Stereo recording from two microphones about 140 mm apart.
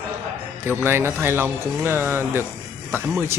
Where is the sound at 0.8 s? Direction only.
15° right (ahead or behind).